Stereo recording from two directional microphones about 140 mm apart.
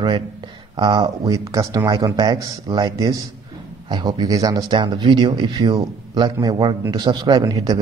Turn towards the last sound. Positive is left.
turn(degrees=-30)  # may be behind; listen again after turning